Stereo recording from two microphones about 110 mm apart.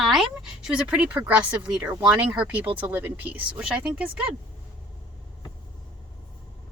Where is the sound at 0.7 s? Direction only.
10° right (ahead or behind).